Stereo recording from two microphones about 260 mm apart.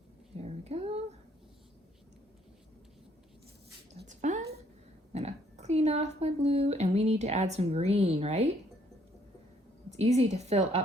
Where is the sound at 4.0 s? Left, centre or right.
Right.